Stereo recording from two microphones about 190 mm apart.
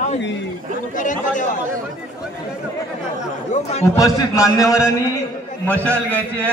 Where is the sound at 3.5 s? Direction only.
35° left (ahead or behind).